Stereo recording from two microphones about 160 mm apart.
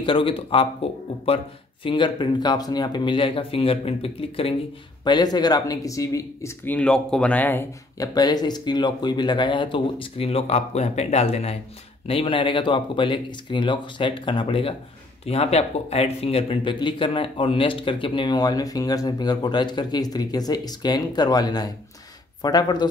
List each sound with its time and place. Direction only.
0.0 s speech: 35° left (ahead or behind)
5.0 s speech: 25° left (ahead or behind)
8.1 s speech: 25° left (ahead or behind)